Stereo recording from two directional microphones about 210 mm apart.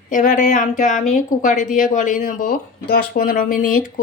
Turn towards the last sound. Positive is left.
turn(degrees=40)  # may be behind; listen again after turning